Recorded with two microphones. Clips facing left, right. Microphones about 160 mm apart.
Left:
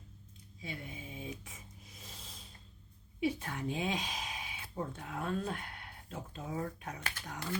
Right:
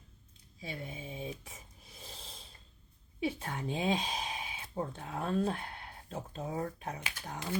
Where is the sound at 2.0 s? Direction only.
30° right (ahead or behind).